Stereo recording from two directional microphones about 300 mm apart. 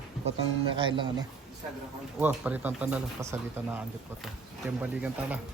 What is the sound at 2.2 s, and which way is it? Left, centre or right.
Speech, centre.